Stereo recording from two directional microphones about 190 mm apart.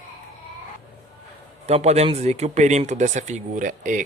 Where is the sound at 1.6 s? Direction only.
35° right (ahead or behind).